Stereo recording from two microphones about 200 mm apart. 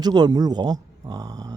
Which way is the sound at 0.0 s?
20° right (ahead or behind).